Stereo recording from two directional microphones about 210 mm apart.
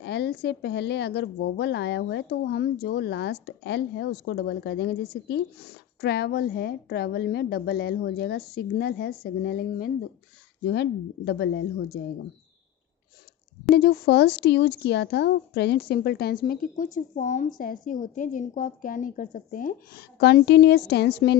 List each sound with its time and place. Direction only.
0.0 s a woman's voice: 50° left (ahead or behind)
13.7 s a woman's voice: 50° left (ahead or behind)